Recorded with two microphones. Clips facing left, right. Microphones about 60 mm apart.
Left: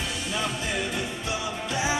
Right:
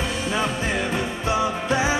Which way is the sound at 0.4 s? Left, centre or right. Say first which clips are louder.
Right 4 dB; right.